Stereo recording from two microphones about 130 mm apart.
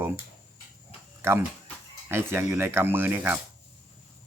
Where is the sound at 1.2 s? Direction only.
20° right (ahead or behind).